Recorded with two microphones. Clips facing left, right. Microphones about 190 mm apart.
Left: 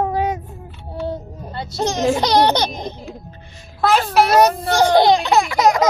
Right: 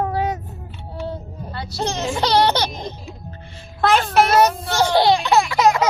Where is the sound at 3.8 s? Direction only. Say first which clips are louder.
Left 1 dB; 5° left (ahead or behind).